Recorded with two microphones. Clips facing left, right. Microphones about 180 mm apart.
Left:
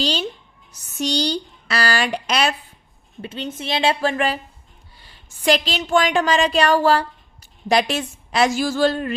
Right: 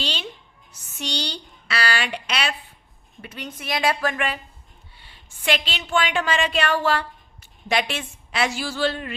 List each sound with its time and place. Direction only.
0.0 s a woman's voice: 40° left (ahead or behind)
3.2 s a woman's voice: 30° left (ahead or behind); by 9.1 s 45° left (ahead or behind)